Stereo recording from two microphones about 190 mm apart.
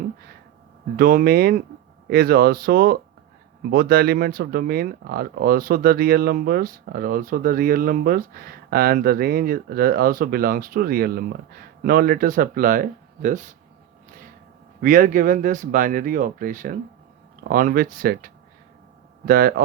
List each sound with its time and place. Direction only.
0.9 s speech: 50° right (ahead or behind)
14.8 s speech: 45° right (ahead or behind)